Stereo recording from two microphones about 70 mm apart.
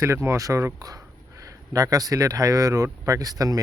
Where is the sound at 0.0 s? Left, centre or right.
Right.